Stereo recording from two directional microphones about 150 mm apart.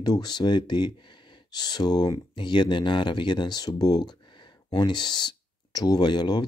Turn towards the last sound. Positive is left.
turn(degrees=30)  # may be behind; listen again after turning